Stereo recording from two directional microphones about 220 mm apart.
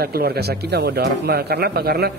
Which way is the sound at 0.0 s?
45° right (ahead or behind).